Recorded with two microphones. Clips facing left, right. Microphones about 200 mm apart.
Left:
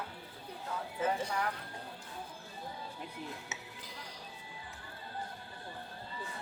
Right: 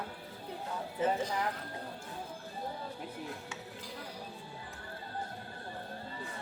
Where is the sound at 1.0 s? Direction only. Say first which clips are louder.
Right 2 dB; 20° right (ahead or behind).